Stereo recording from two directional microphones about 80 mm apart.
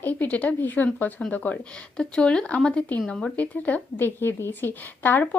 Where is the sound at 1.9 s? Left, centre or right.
Centre.